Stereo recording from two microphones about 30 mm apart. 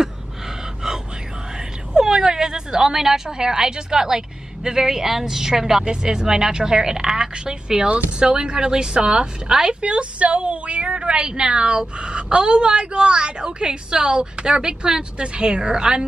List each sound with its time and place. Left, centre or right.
2.0 s a woman's voice: right
7.6 s a woman's voice: right
9.8 s a woman's voice: right